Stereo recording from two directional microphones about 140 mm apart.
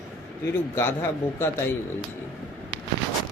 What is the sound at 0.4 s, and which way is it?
A man's voice, 20° left (ahead or behind).